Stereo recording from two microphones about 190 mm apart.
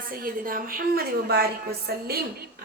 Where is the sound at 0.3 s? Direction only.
50° right (ahead or behind).